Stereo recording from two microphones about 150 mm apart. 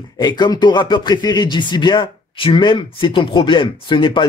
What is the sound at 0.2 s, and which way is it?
Speech, 25° left (ahead or behind).